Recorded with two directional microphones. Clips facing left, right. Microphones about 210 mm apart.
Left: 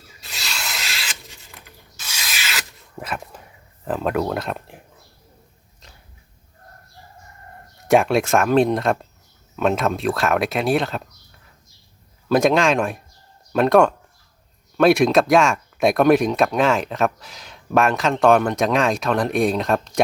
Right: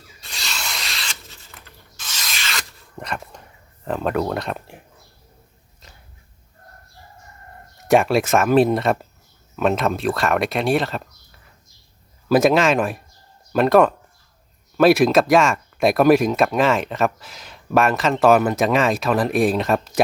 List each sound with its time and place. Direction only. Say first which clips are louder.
0.2 s spray: even; centre (ahead or behind)
1.6 s rub: even; 10° left (ahead or behind)
3.8 s speech: even; centre (ahead or behind)
7.8 s speech: even; centre (ahead or behind)